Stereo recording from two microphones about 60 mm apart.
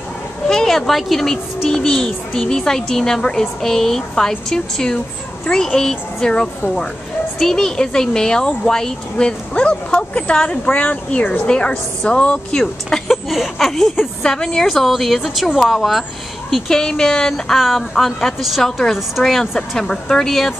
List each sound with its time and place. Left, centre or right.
0.5 s a child's voice: centre
12.9 s a woman's voice: centre